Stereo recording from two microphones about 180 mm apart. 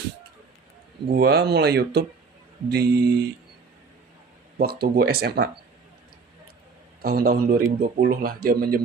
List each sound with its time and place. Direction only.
1.0 s speech: 65° right (ahead or behind)
4.6 s speech: 60° right (ahead or behind)
7.0 s speech: 55° right (ahead or behind)